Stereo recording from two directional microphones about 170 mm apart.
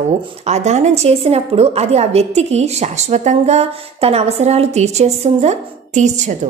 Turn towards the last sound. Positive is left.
turn(degrees=-45)  # may be behind; listen again after turning